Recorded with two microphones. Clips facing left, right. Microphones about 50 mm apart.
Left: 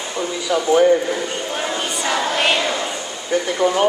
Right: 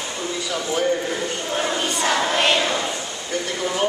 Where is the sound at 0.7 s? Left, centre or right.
Centre.